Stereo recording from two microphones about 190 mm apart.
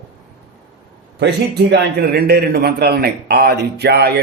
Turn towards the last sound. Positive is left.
turn(degrees=-60)  # may be behind; listen again after turning